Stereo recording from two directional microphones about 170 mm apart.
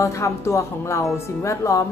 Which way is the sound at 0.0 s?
15° left (ahead or behind).